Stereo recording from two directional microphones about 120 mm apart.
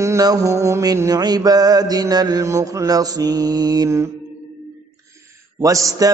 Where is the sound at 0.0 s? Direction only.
30° right (ahead or behind).